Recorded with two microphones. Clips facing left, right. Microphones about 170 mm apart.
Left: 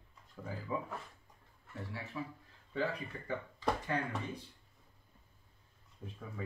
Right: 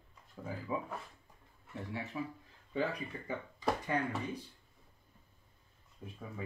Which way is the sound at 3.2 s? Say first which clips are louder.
Even; 5° right (ahead or behind).